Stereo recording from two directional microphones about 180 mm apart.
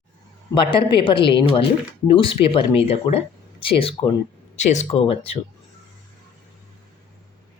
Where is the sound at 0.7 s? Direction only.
30° left (ahead or behind).